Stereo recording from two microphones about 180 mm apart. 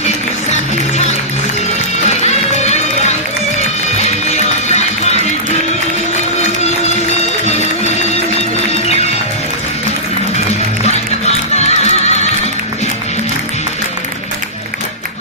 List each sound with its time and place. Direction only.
2.0 s music: 40° left (ahead or behind)
4.3 s music: 40° left (ahead or behind)
11.5 s music: 40° left (ahead or behind)